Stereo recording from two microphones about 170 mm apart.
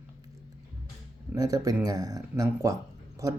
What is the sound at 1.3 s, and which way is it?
Speech, 20° right (ahead or behind).